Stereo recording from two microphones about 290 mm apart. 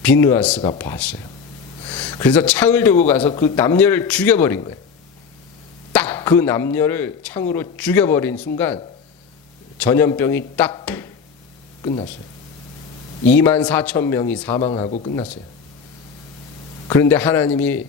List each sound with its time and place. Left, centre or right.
0.0 s speech: centre
5.9 s speech: centre
9.8 s speech: centre
11.8 s speech: centre
13.2 s speech: centre
14.7 s speech: left
16.9 s speech: centre